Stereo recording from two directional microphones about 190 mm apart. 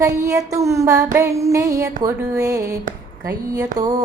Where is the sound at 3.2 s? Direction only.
20° right (ahead or behind).